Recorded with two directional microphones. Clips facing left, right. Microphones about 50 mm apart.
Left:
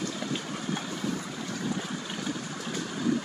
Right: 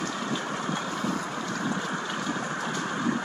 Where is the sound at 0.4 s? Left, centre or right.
Right.